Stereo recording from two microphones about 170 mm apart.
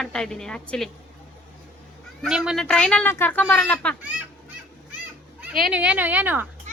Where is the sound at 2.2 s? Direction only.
5° right (ahead or behind).